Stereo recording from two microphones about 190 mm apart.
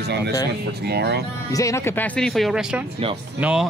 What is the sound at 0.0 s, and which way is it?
Speech, 60° right (ahead or behind).